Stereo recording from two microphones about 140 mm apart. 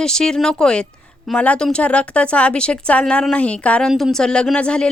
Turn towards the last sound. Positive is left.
turn(degrees=5)  # may be behind; listen again after turning